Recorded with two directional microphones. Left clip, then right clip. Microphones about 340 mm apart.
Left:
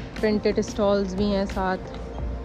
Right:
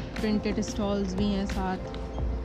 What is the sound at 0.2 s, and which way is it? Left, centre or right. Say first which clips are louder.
Speech: left 7 dB; left.